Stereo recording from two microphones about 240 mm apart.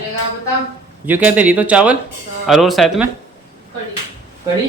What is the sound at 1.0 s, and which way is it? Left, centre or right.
Speech, centre.